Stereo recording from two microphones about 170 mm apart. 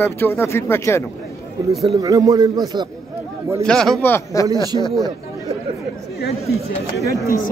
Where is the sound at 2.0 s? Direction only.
20° right (ahead or behind).